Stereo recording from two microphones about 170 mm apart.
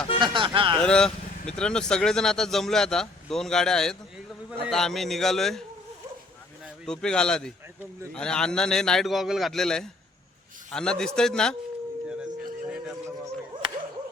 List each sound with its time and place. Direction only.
0.2 s speech: 30° right (ahead or behind)
0.8 s speech: 5° left (ahead or behind)
6.8 s speech: 5° left (ahead or behind)
12.0 s a sound: 5° right (ahead or behind)